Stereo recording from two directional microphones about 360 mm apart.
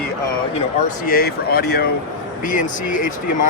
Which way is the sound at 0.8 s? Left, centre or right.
Left.